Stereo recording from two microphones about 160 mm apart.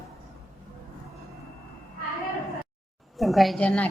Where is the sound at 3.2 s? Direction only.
Centre (ahead or behind).